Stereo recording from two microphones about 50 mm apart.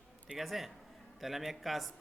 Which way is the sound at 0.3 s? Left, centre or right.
Centre.